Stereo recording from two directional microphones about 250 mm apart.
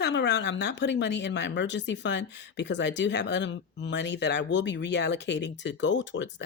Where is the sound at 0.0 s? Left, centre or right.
Left.